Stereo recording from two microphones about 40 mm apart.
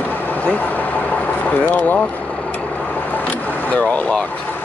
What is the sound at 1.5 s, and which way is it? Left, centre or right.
Speech, left.